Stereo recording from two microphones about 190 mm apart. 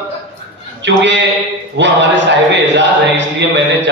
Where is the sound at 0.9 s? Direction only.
70° right (ahead or behind).